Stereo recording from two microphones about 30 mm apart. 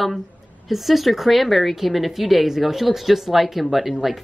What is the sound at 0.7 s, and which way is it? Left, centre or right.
A woman's voice, centre.